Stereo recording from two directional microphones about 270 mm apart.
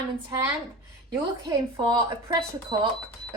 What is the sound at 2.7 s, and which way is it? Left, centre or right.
Speech, centre.